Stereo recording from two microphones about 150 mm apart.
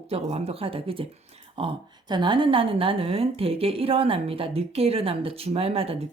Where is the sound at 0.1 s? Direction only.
45° right (ahead or behind).